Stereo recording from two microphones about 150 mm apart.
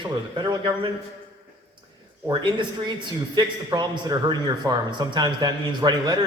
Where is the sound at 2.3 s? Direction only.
30° right (ahead or behind).